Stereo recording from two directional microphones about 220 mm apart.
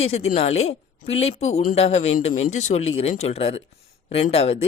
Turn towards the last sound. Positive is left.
turn(degrees=25)  # may be behind; listen again after turning